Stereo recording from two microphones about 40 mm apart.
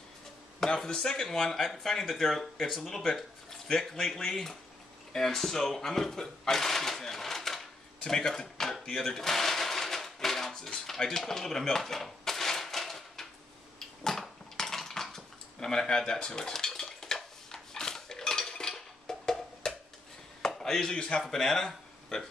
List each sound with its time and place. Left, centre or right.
0.7 s speech: centre
8.8 s a sound: centre
10.9 s drawer open or close: centre
13.7 s a sound: centre
14.2 s cutlery: centre
20.4 s chop: centre
20.9 s speech: left
21.2 s speech: centre